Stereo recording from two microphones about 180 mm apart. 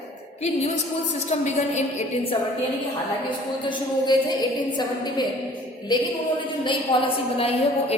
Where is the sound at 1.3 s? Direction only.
40° left (ahead or behind).